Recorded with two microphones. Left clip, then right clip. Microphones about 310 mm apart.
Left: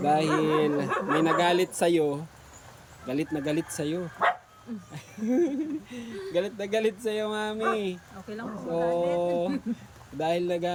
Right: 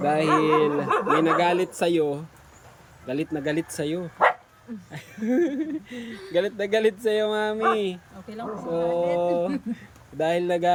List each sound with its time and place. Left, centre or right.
0.0 s a man's voice: centre
0.3 s speech: right
0.5 s a man's voice: centre